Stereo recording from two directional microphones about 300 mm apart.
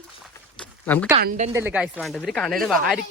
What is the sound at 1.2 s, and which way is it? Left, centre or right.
Speech, right.